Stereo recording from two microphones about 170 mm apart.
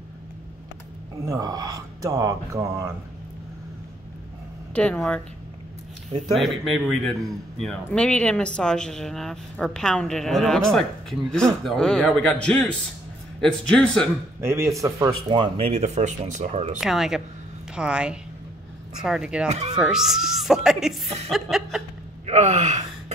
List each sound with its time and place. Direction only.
1.2 s speech: 20° right (ahead or behind)
4.7 s speech: 5° left (ahead or behind)
6.3 s a man's voice: centre (ahead or behind)
14.4 s speech: 15° right (ahead or behind); by 16.7 s 40° right (ahead or behind)
16.8 s a man's voice: centre (ahead or behind)
22.2 s gasp: 40° right (ahead or behind)